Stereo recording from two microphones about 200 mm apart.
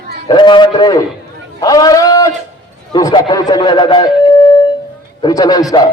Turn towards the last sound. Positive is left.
turn(degrees=20)  # may be behind; listen again after turning